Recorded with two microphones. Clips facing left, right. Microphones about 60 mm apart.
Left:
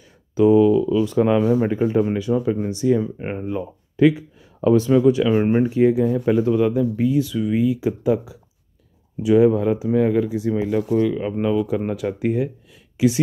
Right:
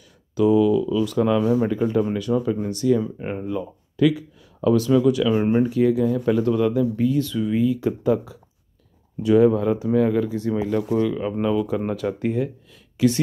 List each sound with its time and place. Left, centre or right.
0.3 s speech: left; by 13.2 s centre